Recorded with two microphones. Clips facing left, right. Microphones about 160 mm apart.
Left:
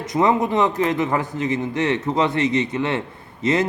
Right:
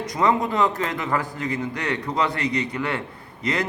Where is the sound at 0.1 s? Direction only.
20° left (ahead or behind).